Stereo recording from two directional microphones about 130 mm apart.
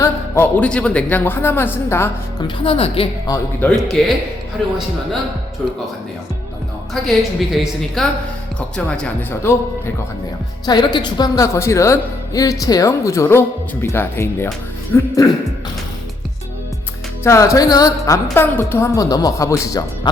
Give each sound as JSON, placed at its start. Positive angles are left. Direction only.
{"t": 0.0, "sound": "speech", "side_deg": 15}
{"t": 2.6, "sound": "a woman's voice", "side_deg": 45}
{"t": 3.6, "sound": "a woman's voice", "side_deg": 10}
{"t": 6.9, "sound": "a woman's voice", "side_deg": 0}
{"t": 10.7, "sound": "a woman's voice", "side_deg": 35}
{"t": 17.2, "sound": "a woman's voice", "side_deg": 25}